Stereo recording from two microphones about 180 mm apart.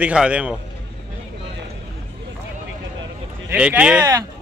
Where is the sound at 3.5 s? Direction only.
5° right (ahead or behind).